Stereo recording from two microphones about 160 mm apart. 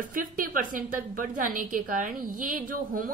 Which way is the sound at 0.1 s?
60° right (ahead or behind).